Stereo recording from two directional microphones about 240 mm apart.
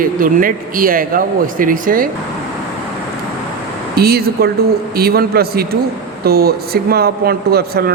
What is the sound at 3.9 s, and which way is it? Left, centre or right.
A man's voice, right.